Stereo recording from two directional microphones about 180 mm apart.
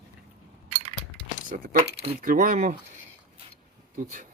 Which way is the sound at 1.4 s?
50° right (ahead or behind).